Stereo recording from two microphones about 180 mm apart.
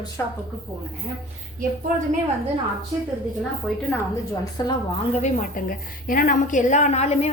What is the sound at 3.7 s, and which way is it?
Speech, centre (ahead or behind).